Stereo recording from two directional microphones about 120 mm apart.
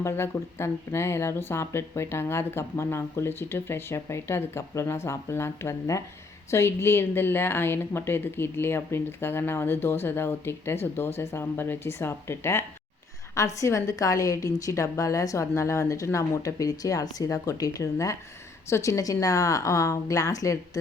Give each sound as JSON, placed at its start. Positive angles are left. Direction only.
{"t": 0.0, "sound": "speech", "side_deg": 20}